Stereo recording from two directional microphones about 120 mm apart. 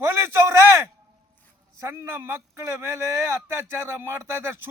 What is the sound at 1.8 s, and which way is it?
Speech, 20° right (ahead or behind).